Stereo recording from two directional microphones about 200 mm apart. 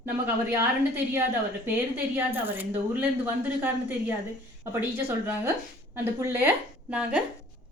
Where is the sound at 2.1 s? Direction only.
10° right (ahead or behind).